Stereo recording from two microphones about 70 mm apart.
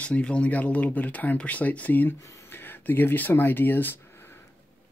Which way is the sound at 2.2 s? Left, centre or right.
Left.